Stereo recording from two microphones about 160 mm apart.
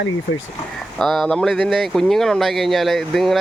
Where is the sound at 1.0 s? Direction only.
Centre (ahead or behind).